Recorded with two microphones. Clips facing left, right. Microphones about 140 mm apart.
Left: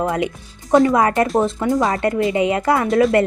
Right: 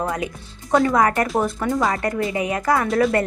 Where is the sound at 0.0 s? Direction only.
25° left (ahead or behind).